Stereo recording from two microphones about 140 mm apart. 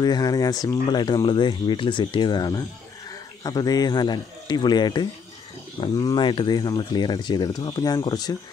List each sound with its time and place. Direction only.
0.0 s speech: 30° left (ahead or behind)